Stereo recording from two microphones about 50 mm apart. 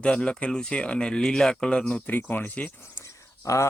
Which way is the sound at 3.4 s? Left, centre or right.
Left.